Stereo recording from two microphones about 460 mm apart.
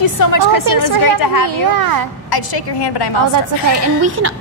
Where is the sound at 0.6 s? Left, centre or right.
Right.